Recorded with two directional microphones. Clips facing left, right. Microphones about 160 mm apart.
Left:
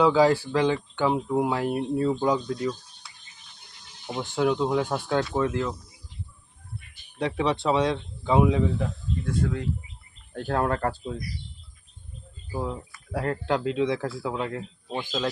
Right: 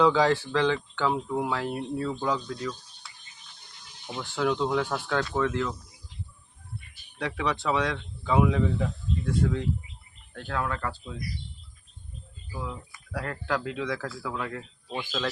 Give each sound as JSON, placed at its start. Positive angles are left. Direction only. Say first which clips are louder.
{"t": 0.0, "sound": "speech", "louder": "left 2 dB", "side_deg": 10}
{"t": 4.0, "sound": "speech", "louder": "left 3 dB", "side_deg": 20}
{"t": 7.2, "sound": "speech", "louder": "left 4 dB", "side_deg": 25}
{"t": 9.2, "sound": "speech", "louder": "right 1 dB", "side_deg": 0}
{"t": 10.3, "sound": "speech", "louder": "left 6 dB", "side_deg": 40}
{"t": 12.5, "sound": "speech", "louder": "left 6 dB", "side_deg": 35}